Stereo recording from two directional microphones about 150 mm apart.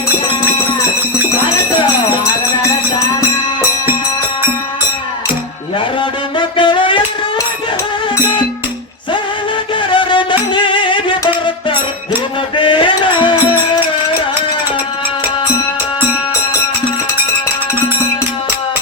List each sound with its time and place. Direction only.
6.0 s music: 30° left (ahead or behind)
9.9 s music: 35° left (ahead or behind)
12.5 s music: 35° left (ahead or behind)